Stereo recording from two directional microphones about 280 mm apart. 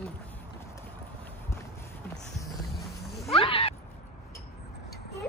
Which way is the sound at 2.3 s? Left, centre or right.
Centre.